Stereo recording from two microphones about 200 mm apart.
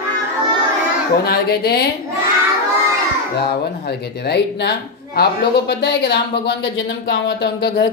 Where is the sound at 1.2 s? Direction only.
50° left (ahead or behind).